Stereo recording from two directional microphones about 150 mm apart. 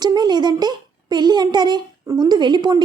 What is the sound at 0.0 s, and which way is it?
A child's voice, 30° right (ahead or behind).